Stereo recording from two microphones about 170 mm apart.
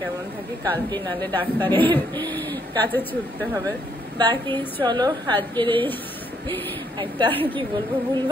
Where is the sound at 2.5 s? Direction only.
25° right (ahead or behind).